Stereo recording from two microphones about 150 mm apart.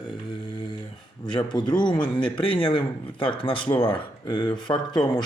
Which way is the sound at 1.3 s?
30° left (ahead or behind).